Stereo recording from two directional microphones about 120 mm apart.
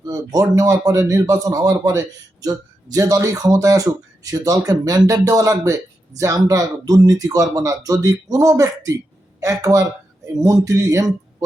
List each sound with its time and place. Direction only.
0.0 s a man's voice: 30° right (ahead or behind)